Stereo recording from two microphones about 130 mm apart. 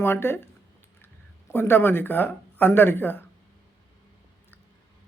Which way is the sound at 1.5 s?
15° left (ahead or behind).